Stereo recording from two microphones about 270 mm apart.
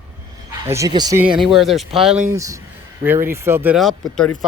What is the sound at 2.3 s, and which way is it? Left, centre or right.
Speech, centre.